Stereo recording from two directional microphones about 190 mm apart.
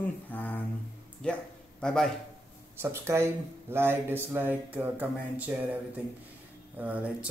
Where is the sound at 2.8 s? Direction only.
15° right (ahead or behind).